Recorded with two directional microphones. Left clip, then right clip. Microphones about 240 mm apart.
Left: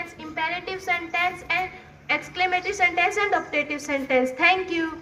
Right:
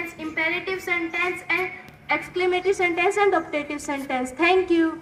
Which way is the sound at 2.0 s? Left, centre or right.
Right.